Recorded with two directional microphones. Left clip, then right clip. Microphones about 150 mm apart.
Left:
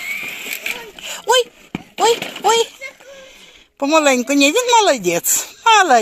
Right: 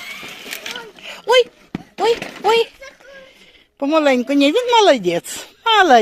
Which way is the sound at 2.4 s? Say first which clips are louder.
Right 1 dB; 15° right (ahead or behind).